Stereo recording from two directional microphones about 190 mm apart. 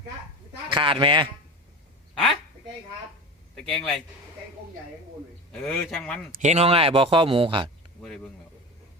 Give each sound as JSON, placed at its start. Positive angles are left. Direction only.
{"t": 0.7, "sound": "speech", "side_deg": -25}
{"t": 3.5, "sound": "speech", "side_deg": 5}
{"t": 5.5, "sound": "speech", "side_deg": 5}
{"t": 6.4, "sound": "speech", "side_deg": -35}
{"t": 8.0, "sound": "speech", "side_deg": 5}